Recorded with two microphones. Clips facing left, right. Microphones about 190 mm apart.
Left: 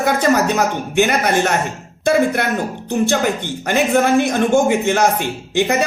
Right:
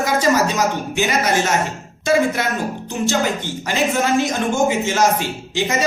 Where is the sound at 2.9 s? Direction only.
55° left (ahead or behind).